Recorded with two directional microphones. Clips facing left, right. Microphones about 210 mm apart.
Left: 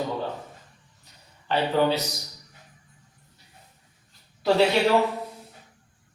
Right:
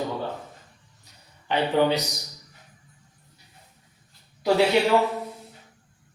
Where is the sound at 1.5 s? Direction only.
15° right (ahead or behind).